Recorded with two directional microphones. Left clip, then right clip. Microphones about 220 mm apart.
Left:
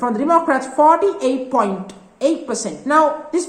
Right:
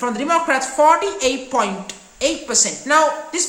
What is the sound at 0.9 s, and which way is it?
A woman's voice, 5° right (ahead or behind).